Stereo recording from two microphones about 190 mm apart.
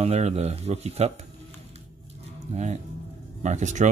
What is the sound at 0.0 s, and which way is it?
Speech, 35° right (ahead or behind).